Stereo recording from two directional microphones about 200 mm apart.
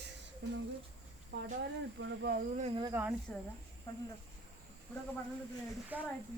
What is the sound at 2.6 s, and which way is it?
Speech, 30° right (ahead or behind).